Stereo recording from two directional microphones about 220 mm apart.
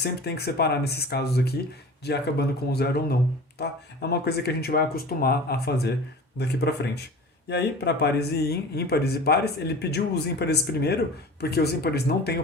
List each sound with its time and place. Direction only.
0.0 s speech: 45° left (ahead or behind)